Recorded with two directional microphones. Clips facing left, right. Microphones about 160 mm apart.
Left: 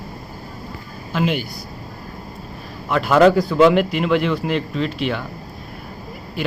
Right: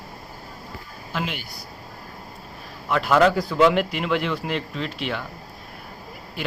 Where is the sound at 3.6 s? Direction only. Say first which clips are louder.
Left 4 dB; 65° left (ahead or behind).